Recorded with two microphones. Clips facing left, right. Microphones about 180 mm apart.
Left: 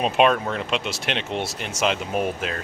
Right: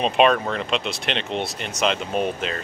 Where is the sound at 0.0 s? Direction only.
5° left (ahead or behind).